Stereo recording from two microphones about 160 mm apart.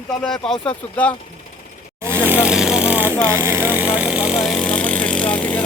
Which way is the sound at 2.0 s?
10° right (ahead or behind).